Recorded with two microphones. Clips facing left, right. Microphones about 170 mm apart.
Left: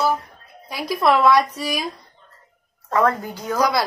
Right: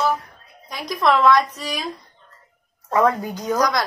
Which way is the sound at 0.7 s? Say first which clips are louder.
Left 1 dB; 5° left (ahead or behind).